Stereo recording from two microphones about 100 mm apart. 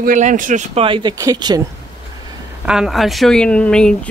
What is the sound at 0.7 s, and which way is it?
Speech, 60° right (ahead or behind).